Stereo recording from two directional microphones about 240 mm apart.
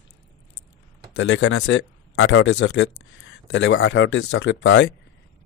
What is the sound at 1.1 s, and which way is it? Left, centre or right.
Speech, left.